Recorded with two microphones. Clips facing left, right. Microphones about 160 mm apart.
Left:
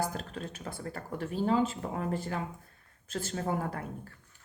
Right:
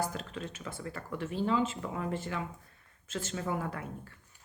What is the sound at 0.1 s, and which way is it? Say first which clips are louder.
Speech: left 1 dB; 40° left (ahead or behind).